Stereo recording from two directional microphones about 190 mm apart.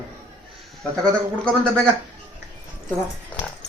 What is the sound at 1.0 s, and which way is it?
Speech, 5° left (ahead or behind).